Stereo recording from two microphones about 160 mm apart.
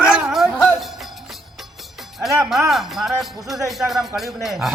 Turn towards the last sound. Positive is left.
turn(degrees=0)  # may be behind; listen again after turning